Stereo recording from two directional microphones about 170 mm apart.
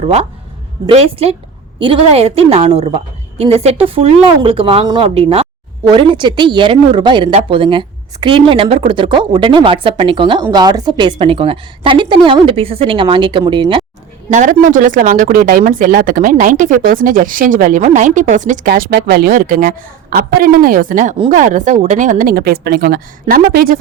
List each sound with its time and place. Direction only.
0.0 s a woman's voice: 35° right (ahead or behind)
14.3 s speech: 45° right (ahead or behind)
18.7 s a woman's voice: 70° right (ahead or behind)